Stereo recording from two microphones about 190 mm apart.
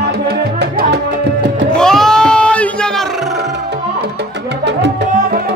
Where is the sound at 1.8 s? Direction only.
5° left (ahead or behind).